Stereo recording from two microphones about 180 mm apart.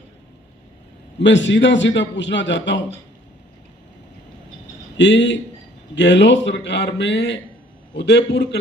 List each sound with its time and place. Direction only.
1.2 s a man's voice: 85° left
4.9 s a man's voice: 75° left (ahead or behind)